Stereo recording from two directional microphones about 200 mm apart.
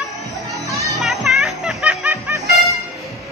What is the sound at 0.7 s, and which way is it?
Children playing, 15° right (ahead or behind).